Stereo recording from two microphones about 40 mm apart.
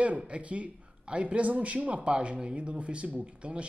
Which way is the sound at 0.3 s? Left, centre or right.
Right.